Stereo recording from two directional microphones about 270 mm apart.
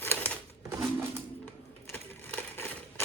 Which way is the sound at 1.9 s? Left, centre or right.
Centre.